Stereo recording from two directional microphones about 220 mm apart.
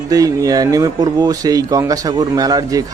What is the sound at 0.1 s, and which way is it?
Speech, 15° right (ahead or behind).